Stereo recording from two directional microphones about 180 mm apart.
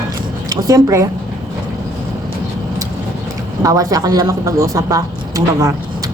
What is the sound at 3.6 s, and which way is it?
A woman's voice, 20° right (ahead or behind).